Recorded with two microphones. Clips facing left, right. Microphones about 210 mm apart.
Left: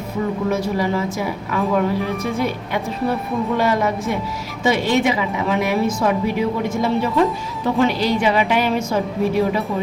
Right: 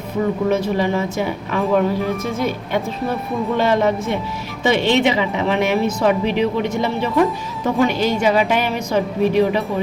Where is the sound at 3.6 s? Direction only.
25° right (ahead or behind).